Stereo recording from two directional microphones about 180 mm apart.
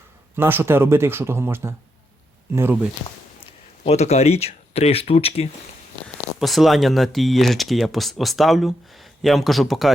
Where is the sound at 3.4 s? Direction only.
35° left (ahead or behind).